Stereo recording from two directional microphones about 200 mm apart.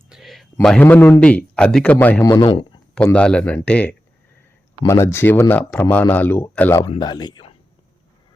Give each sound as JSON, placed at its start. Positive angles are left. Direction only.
{"t": 0.1, "sound": "a sound", "side_deg": 0}
{"t": 0.5, "sound": "a man's voice", "side_deg": 5}
{"t": 2.9, "sound": "a man's voice", "side_deg": 5}